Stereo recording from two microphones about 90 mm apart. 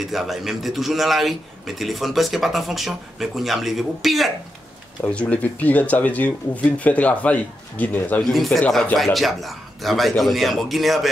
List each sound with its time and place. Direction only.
0.0 s speech: centre (ahead or behind)
5.0 s speech: 15° left (ahead or behind)
8.2 s speech: centre (ahead or behind)